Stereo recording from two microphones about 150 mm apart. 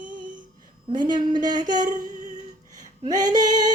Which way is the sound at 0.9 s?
30° right (ahead or behind).